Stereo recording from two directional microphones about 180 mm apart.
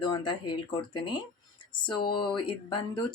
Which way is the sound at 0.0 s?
25° left (ahead or behind).